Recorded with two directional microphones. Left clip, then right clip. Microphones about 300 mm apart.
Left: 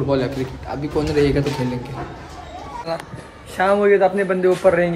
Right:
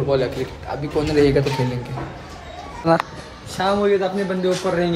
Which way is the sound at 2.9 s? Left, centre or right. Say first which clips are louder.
Right 9 dB; right.